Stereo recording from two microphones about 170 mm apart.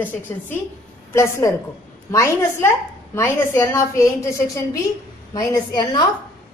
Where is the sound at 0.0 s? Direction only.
10° left (ahead or behind).